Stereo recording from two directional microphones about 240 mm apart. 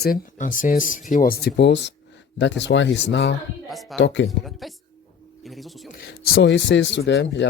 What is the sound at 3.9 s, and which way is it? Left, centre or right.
Speech, left.